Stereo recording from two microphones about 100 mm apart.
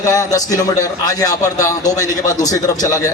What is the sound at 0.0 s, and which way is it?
Speech, 35° left (ahead or behind).